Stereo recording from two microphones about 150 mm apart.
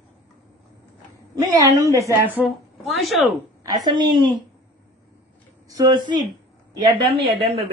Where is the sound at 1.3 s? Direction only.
25° right (ahead or behind).